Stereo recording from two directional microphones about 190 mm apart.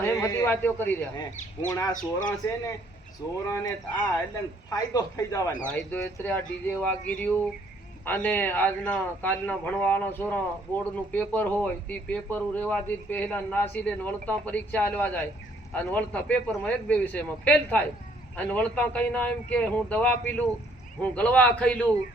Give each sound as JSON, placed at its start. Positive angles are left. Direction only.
{"t": 0.0, "sound": "a man's voice", "side_deg": 15}
{"t": 3.4, "sound": "a man's voice", "side_deg": 15}